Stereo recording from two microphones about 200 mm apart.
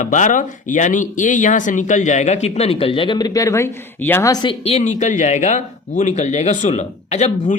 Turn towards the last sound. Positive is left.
turn(degrees=35)  # may be behind; listen again after turning